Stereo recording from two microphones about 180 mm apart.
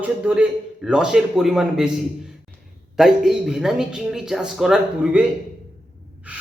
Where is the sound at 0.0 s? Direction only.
10° right (ahead or behind).